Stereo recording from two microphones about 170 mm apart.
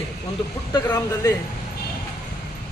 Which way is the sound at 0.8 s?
15° left (ahead or behind).